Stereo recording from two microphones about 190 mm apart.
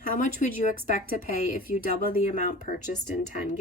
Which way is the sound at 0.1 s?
45° left (ahead or behind).